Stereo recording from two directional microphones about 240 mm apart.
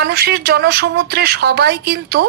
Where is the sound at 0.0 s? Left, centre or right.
Right.